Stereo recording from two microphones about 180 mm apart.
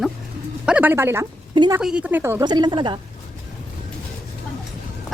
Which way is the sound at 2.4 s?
25° right (ahead or behind).